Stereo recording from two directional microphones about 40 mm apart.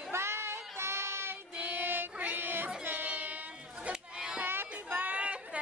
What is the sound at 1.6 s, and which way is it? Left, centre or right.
Child singing, right.